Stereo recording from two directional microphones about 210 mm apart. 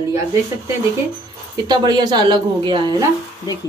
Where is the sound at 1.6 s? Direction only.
20° right (ahead or behind).